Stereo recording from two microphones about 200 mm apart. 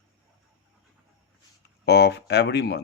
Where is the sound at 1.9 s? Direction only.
55° left (ahead or behind).